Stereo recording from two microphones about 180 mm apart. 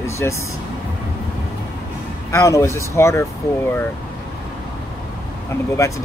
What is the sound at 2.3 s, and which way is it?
Speech, 15° left (ahead or behind).